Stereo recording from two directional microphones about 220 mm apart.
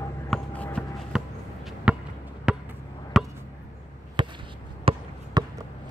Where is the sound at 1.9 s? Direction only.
5° right (ahead or behind).